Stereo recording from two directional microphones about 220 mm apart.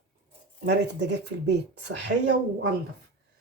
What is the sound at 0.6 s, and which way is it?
Speech, 50° right (ahead or behind).